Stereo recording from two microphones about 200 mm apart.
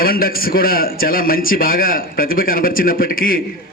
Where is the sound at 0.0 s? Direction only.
50° left (ahead or behind).